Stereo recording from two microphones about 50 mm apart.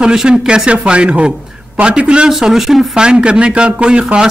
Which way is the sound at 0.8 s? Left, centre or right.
Right.